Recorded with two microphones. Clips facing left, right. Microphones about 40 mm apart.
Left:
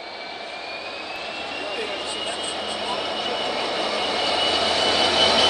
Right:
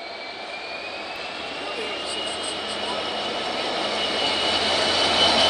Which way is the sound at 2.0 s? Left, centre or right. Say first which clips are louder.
Left 1 dB; left.